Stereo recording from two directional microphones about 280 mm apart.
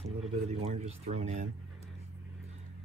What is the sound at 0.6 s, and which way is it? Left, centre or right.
Speech, right.